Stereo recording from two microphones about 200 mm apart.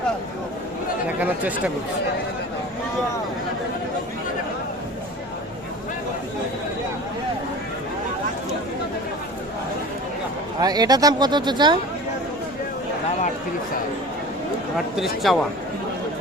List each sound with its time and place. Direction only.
1.2 s speech: 5° right (ahead or behind)
10.6 s speech: 20° right (ahead or behind)
14.9 s speech: centre (ahead or behind)